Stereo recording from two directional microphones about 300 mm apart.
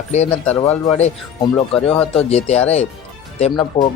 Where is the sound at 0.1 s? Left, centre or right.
Left.